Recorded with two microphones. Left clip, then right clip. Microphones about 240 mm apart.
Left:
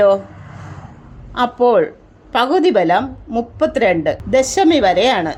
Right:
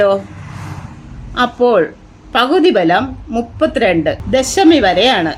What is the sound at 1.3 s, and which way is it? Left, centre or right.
A woman's voice, centre.